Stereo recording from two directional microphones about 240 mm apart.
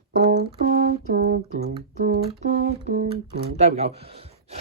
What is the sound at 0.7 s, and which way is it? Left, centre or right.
Speech, right.